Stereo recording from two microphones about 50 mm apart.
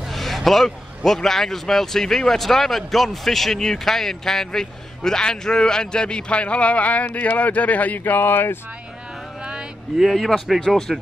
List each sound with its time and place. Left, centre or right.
0.1 s speech: centre; by 8.0 s left
8.0 s speech: left
9.4 s a sound: centre
9.9 s a man's voice: centre